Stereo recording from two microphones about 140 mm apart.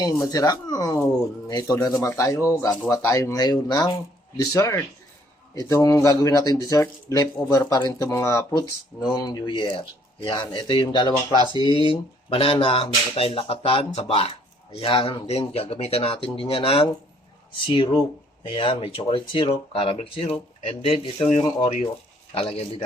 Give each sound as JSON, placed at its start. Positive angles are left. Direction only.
{"t": 0.0, "sound": "speech", "side_deg": 25}